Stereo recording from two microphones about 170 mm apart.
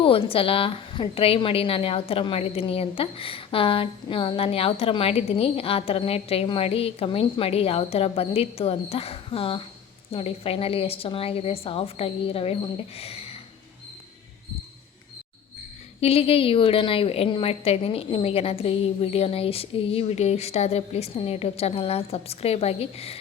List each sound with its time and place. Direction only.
0.0 s a woman's voice: 35° left (ahead or behind)
13.0 s a sound: 35° left (ahead or behind)
16.0 s a woman's voice: 35° left (ahead or behind)